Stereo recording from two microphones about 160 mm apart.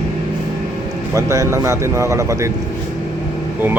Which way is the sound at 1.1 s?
20° right (ahead or behind).